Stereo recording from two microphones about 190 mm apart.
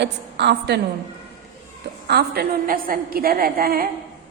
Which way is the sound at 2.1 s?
55° right (ahead or behind).